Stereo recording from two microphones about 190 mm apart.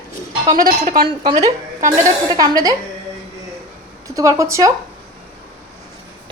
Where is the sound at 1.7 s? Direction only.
45° right (ahead or behind).